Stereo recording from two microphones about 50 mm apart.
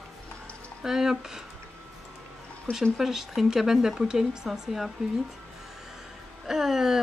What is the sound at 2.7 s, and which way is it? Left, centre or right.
Speech, left.